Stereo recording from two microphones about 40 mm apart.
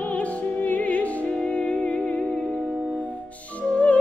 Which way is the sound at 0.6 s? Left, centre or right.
Left.